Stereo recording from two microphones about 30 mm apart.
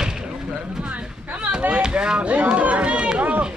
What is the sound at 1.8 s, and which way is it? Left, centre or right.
Speech, right.